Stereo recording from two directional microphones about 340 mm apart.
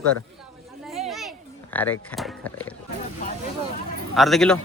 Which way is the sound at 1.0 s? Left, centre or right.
Centre.